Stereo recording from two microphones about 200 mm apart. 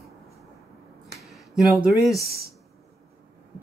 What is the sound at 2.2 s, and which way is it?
Speech, 50° right (ahead or behind).